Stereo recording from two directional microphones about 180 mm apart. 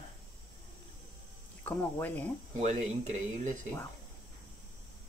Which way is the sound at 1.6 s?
10° left (ahead or behind).